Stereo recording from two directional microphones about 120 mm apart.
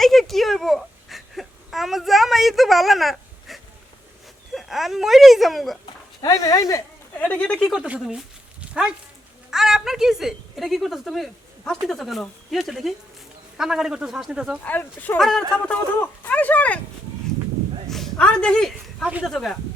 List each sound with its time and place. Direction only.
0.0 s a sound: centre (ahead or behind)
4.5 s a woman's voice: centre (ahead or behind)
6.2 s speech: 25° left (ahead or behind)
7.2 s speech: 15° left (ahead or behind)
7.8 s a woman's voice: 5° right (ahead or behind)
14.6 s speech: 15° left (ahead or behind)
15.2 s a woman's voice: 5° left (ahead or behind)
15.6 s speech: 15° left (ahead or behind)
17.8 s a woman's voice: 5° left (ahead or behind)